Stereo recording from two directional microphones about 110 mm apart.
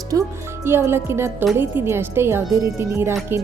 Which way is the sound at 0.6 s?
20° right (ahead or behind).